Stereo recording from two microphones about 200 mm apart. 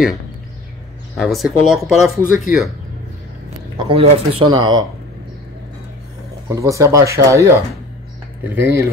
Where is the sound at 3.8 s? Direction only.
25° right (ahead or behind).